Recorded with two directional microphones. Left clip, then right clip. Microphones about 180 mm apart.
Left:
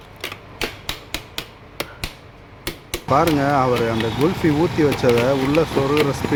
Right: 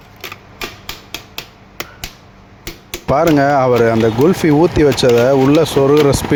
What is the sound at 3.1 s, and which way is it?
Speech, 50° right (ahead or behind).